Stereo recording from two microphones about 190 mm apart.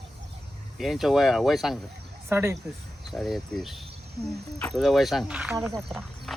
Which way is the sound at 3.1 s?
Centre (ahead or behind).